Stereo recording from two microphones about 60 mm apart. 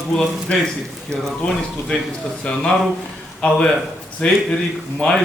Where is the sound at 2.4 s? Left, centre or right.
Centre.